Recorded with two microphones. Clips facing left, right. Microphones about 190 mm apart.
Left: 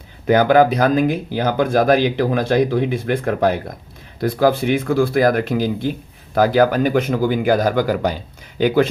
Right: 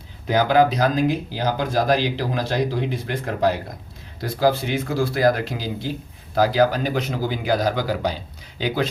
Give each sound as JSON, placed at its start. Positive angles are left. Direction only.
{"t": 0.3, "sound": "speech", "side_deg": 55}